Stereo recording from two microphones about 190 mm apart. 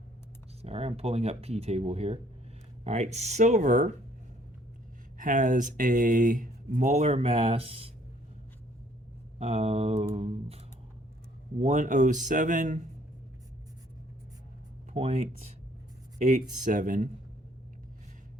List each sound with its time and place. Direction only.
0.6 s speech: 35° right (ahead or behind)
5.1 s speech: 45° right (ahead or behind)
9.4 s speech: 35° right (ahead or behind)
11.6 s speech: 40° right (ahead or behind)
14.9 s speech: 35° right (ahead or behind)